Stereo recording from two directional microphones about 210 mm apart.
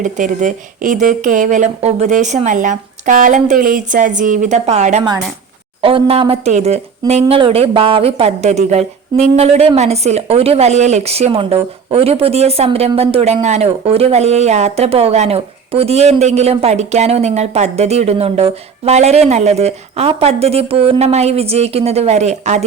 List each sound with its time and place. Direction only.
0.0 s a woman's voice: 35° right (ahead or behind)